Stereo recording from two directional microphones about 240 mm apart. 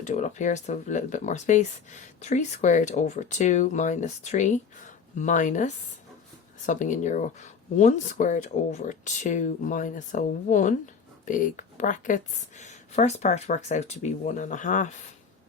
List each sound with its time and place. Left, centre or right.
0.0 s speech: left